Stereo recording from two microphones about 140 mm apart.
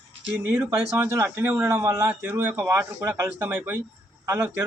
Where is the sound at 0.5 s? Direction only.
15° right (ahead or behind).